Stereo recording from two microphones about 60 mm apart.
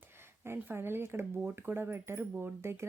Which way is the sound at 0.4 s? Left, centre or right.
Right.